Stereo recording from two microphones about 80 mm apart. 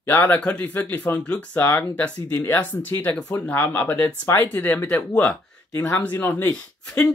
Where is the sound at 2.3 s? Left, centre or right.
Left.